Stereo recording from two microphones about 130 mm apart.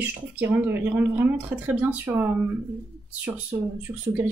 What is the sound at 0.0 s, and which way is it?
Speech, 15° right (ahead or behind).